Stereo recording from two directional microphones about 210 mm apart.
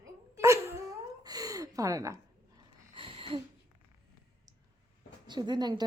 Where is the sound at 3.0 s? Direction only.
25° right (ahead or behind).